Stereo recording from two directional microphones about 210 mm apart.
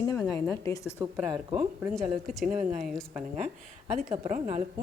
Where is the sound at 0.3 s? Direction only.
15° left (ahead or behind).